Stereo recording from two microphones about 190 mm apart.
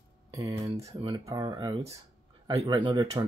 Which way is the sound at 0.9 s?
30° right (ahead or behind).